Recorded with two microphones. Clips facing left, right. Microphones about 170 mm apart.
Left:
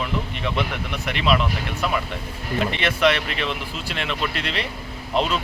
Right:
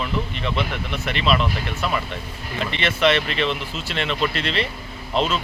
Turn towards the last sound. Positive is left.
turn(degrees=15)  # may be behind; listen again after turning